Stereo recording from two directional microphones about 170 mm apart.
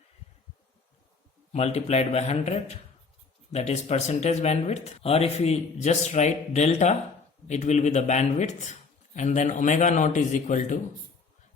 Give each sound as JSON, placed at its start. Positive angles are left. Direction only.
{"t": 1.5, "sound": "a man's voice", "side_deg": 40}